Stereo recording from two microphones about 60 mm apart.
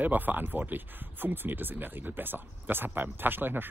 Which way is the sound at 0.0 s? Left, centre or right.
Right.